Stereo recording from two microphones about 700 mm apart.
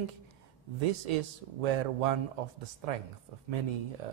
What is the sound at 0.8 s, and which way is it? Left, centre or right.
A man's voice, right.